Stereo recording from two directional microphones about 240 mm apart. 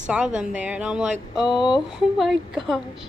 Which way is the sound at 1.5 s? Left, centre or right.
Centre.